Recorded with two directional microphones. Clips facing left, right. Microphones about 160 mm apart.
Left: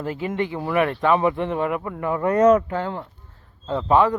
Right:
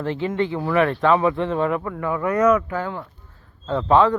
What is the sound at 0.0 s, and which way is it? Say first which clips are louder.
A man's voice: right 2 dB; 10° left (ahead or behind).